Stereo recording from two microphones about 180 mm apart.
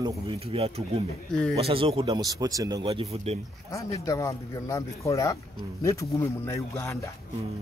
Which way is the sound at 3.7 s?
15° left (ahead or behind).